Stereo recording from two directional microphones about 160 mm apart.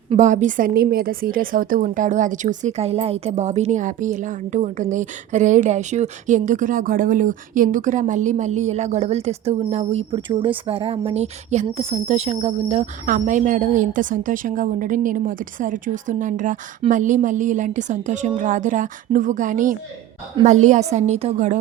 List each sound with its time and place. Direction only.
0.2 s a woman's voice: 50° right (ahead or behind)